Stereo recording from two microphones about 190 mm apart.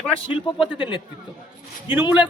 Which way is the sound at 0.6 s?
25° left (ahead or behind).